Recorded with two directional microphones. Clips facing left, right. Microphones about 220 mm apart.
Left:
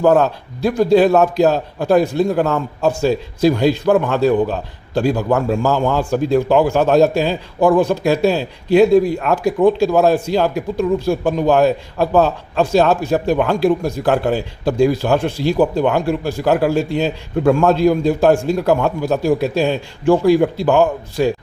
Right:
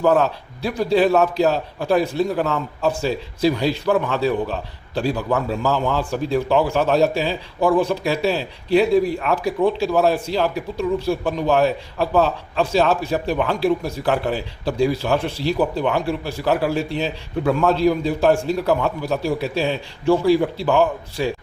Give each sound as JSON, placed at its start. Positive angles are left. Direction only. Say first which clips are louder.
{"t": 0.0, "sound": "a man's voice", "louder": "left 4 dB", "side_deg": 45}